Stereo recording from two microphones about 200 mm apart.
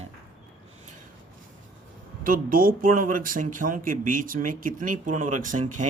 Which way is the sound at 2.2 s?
45° right (ahead or behind).